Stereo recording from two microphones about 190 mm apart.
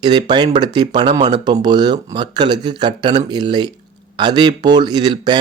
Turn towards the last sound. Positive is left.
turn(degrees=-20)  # may be behind; listen again after turning